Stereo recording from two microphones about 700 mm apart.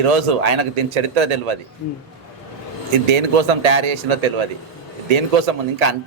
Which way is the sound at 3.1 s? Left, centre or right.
Right.